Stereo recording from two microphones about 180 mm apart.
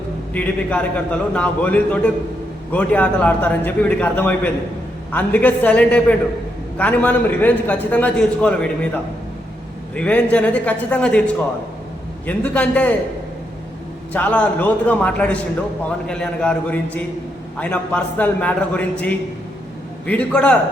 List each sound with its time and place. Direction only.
0.3 s a man's voice: 5° left (ahead or behind)
9.9 s a man's voice: 5° left (ahead or behind)
12.2 s a man's voice: 10° left (ahead or behind)
14.1 s a man's voice: 10° left (ahead or behind)